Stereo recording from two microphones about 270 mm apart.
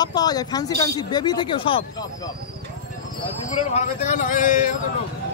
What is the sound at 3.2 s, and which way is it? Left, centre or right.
A man's voice, left.